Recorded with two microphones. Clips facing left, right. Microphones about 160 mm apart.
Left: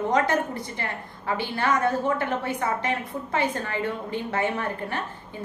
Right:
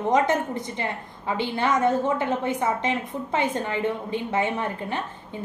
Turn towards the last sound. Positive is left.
turn(degrees=-20)  # may be behind; listen again after turning